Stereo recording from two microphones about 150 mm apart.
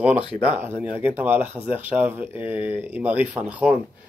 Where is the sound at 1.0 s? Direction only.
10° right (ahead or behind).